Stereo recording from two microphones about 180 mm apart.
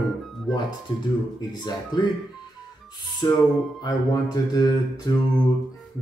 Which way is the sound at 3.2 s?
20° left (ahead or behind).